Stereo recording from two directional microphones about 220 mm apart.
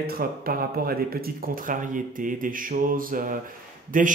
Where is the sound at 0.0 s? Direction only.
45° right (ahead or behind).